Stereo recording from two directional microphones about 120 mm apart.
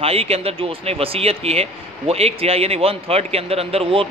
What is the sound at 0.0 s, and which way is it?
Speech, 55° right (ahead or behind).